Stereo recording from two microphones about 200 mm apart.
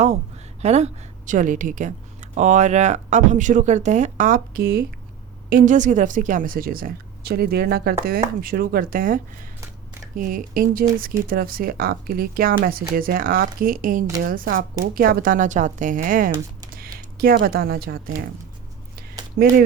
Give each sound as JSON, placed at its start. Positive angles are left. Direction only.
{"t": 0.6, "sound": "a woman's voice", "side_deg": -35}